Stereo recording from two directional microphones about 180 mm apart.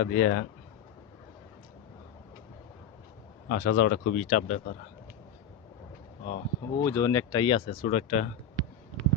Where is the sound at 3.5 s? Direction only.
50° left (ahead or behind).